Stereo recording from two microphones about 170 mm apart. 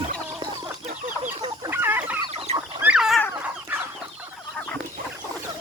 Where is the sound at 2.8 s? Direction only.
5° right (ahead or behind).